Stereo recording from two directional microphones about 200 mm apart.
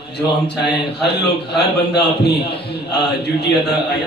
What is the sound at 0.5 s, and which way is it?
A man's voice, 55° left (ahead or behind).